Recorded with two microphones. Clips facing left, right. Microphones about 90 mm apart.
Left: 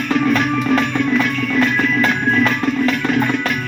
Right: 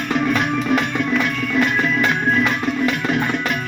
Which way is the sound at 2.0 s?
15° right (ahead or behind).